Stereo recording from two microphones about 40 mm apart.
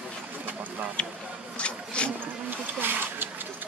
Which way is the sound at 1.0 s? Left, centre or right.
Left.